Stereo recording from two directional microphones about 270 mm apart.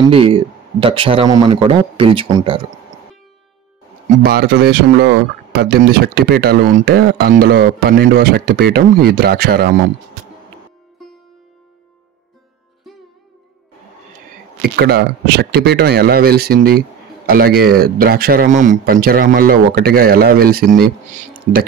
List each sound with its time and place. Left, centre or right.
0.0 s speech: centre
4.2 s speech: right
14.6 s speech: right